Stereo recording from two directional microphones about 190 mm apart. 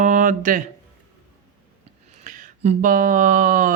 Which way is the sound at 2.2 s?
40° right (ahead or behind).